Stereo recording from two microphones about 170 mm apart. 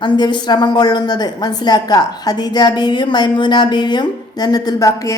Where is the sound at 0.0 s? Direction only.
25° left (ahead or behind).